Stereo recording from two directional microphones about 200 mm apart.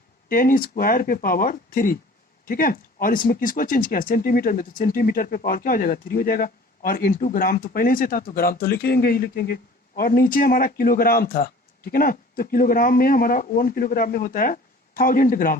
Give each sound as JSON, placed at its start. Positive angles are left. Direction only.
{"t": 0.3, "sound": "speech", "side_deg": 45}